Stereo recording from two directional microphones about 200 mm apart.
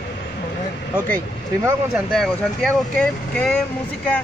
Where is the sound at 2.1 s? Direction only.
Centre (ahead or behind).